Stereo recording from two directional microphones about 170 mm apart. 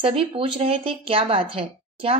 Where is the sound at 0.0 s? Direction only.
30° right (ahead or behind).